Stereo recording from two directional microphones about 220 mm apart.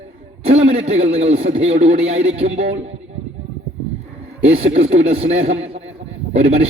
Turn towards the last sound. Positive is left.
turn(degrees=-30)  # may be behind; listen again after turning